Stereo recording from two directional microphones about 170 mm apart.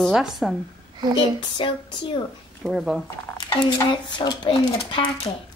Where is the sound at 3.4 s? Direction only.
25° left (ahead or behind).